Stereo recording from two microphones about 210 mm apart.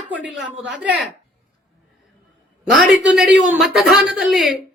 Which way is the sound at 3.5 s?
Centre (ahead or behind).